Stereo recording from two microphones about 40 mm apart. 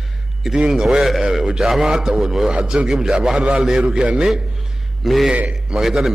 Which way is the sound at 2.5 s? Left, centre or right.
Right.